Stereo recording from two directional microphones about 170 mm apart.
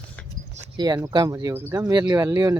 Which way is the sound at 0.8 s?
20° right (ahead or behind).